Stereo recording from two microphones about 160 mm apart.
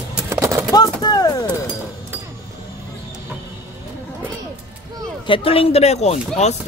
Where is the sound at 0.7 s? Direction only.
25° left (ahead or behind).